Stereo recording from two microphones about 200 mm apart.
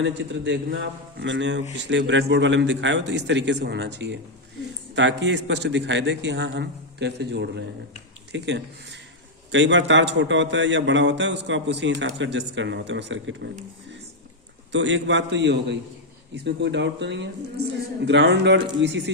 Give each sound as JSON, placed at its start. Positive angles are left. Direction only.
{"t": 0.0, "sound": "a man's voice", "side_deg": -60}
{"t": 14.7, "sound": "a man's voice", "side_deg": -65}